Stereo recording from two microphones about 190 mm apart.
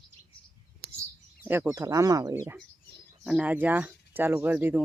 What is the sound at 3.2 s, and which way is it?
Speech, 5° right (ahead or behind).